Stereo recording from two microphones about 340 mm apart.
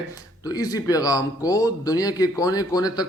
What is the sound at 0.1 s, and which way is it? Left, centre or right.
Speech, centre.